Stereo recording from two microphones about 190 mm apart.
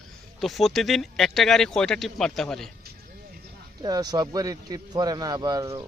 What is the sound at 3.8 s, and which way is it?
Speech, 20° right (ahead or behind).